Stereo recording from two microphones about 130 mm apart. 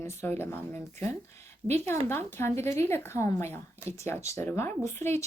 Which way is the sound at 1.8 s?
20° left (ahead or behind).